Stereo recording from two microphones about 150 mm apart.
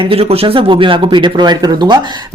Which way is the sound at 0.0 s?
40° right (ahead or behind).